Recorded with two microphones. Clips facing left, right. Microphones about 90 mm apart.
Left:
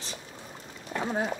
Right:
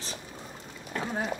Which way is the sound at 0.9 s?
20° left (ahead or behind).